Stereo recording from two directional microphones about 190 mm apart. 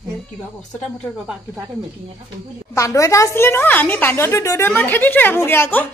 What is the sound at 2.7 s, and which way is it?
A woman's voice, 15° left (ahead or behind).